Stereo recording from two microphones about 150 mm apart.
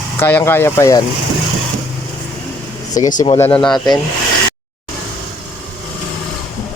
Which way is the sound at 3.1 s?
35° left (ahead or behind).